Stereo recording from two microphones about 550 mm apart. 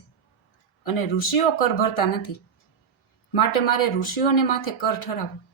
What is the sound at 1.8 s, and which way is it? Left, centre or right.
Speech, left.